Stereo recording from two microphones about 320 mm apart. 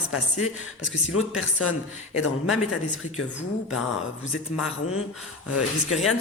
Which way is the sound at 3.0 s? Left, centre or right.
Left.